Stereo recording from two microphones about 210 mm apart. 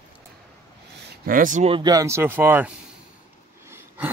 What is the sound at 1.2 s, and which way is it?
Speech, 40° right (ahead or behind).